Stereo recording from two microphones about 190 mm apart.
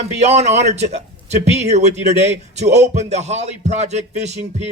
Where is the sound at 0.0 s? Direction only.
35° right (ahead or behind).